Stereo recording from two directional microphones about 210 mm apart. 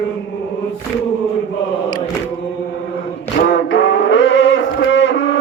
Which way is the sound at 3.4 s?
50° left (ahead or behind).